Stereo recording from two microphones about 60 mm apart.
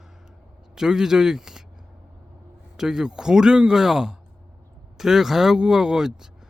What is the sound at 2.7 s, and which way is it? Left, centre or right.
A man's voice, centre.